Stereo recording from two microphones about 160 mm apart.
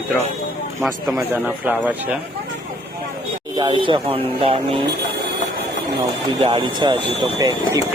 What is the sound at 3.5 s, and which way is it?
Speech, 30° right (ahead or behind).